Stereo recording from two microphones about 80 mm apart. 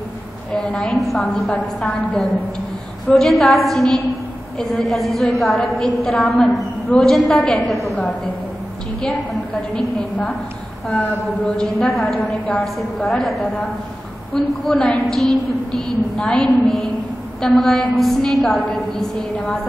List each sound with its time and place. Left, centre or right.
0.7 s a woman's voice: centre
1.5 s a woman's voice: centre
3.2 s a woman's voice: centre
11.4 s a woman's voice: centre